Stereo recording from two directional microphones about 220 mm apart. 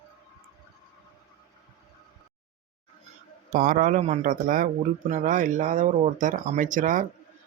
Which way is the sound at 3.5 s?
40° right (ahead or behind).